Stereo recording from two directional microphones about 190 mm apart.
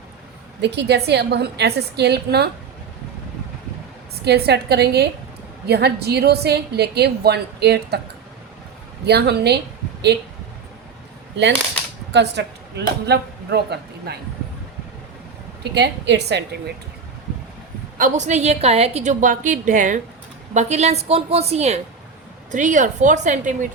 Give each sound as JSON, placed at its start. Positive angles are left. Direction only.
{"t": 0.6, "sound": "a woman's voice", "side_deg": -65}
{"t": 4.2, "sound": "a woman's voice", "side_deg": -60}
{"t": 9.0, "sound": "a woman's voice", "side_deg": -60}
{"t": 12.1, "sound": "speech", "side_deg": -65}
{"t": 15.6, "sound": "a woman's voice", "side_deg": -60}
{"t": 17.9, "sound": "a woman's voice", "side_deg": -40}